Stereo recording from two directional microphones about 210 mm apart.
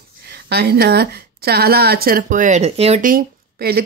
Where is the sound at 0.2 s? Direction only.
50° right (ahead or behind).